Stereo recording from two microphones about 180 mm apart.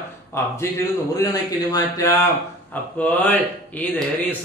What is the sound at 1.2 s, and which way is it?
Speech, 20° left (ahead or behind).